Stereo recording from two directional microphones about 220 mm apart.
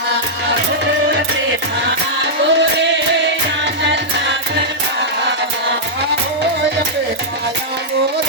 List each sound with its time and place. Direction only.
2.2 s music: 55° right (ahead or behind)